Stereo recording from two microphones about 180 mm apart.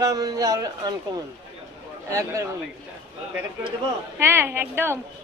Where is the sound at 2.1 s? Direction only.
15° right (ahead or behind).